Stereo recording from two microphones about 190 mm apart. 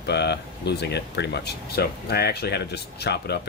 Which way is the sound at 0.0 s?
60° left (ahead or behind).